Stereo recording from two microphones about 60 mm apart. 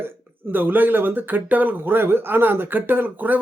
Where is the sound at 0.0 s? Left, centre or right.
Right.